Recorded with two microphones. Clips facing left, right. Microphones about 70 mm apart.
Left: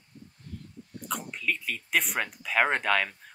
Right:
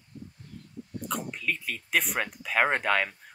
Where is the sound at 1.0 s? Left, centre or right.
Centre.